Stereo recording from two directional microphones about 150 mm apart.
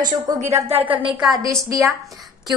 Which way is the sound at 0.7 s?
35° right (ahead or behind).